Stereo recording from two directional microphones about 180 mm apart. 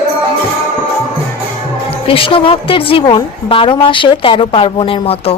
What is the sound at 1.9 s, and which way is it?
A woman's voice, 30° left (ahead or behind).